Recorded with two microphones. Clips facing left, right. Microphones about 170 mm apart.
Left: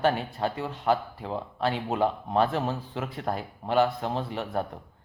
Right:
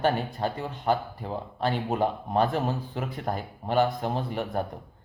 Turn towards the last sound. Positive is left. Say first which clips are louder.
# right 1 dB
turn(degrees=0)  # may be behind; listen again after turning